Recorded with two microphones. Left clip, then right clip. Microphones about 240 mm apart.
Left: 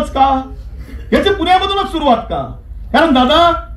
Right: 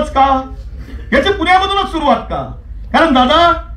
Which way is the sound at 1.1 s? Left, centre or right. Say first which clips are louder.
Right 1 dB; right.